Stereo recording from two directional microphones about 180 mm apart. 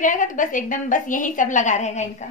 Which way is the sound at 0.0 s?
45° left (ahead or behind).